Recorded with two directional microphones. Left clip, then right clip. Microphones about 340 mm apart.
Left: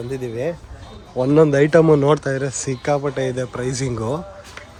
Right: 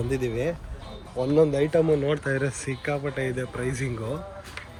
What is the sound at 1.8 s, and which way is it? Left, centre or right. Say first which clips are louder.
Speech: left 8 dB; left.